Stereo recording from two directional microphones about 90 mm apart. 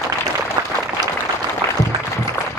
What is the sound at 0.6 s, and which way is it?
Applause, 40° right (ahead or behind).